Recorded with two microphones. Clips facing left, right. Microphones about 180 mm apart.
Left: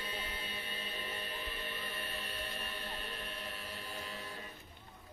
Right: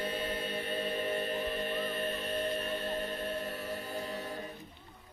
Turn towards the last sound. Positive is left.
turn(degrees=-40)  # may be behind; listen again after turning